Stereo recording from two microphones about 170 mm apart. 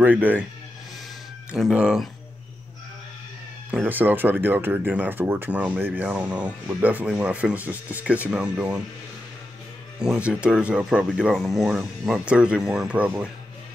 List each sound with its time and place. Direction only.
0.0 s speech: 10° right (ahead or behind)
1.5 s speech: 5° right (ahead or behind)
3.7 s speech: 10° right (ahead or behind)
9.9 s speech: 5° right (ahead or behind)